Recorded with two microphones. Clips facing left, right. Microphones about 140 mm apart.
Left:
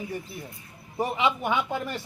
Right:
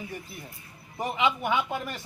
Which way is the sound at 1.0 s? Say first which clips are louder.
Left 1 dB; 35° left (ahead or behind).